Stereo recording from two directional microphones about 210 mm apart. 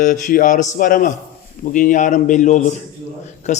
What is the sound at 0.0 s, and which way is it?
Speech, 40° left (ahead or behind).